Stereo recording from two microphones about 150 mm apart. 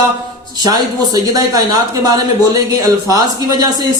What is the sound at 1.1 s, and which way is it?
A man's voice, 25° right (ahead or behind).